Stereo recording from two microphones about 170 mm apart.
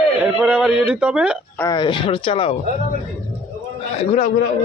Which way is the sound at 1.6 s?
25° left (ahead or behind).